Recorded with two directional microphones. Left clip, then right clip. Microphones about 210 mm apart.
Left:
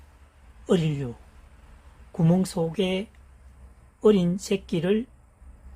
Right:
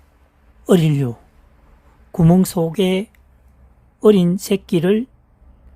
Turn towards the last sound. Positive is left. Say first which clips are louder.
# right 8 dB
turn(degrees=-50)  # may be behind; listen again after turning